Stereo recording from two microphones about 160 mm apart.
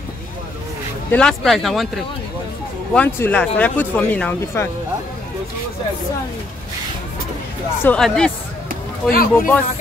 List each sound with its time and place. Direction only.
1.1 s speech: 5° left (ahead or behind)
2.9 s speech: 10° left (ahead or behind)
7.8 s speech: 5° left (ahead or behind)
9.1 s speech: 65° left (ahead or behind)